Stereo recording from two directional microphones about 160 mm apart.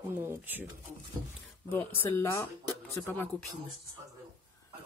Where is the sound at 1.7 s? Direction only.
15° left (ahead or behind).